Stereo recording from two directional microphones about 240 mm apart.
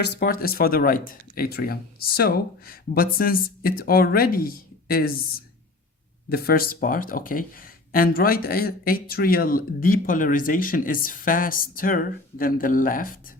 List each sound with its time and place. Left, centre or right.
0.0 s speech: left
6.2 s speech: left